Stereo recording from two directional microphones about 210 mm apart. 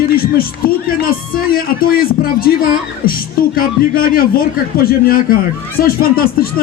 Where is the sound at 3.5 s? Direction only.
45° left (ahead or behind).